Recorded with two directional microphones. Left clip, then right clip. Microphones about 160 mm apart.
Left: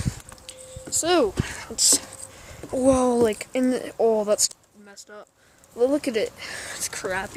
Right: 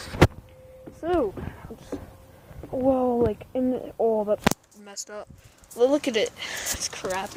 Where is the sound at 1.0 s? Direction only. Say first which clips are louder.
Left 4 dB; 30° left (ahead or behind).